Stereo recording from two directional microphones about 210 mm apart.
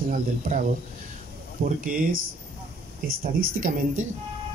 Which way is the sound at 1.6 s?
45° right (ahead or behind).